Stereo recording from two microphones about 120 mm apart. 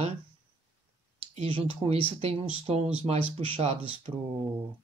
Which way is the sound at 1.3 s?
50° right (ahead or behind).